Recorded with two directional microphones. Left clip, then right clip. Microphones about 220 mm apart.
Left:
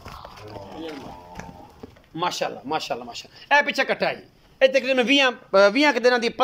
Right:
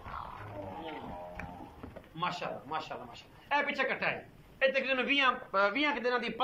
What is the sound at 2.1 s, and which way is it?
A man's voice, 40° left (ahead or behind).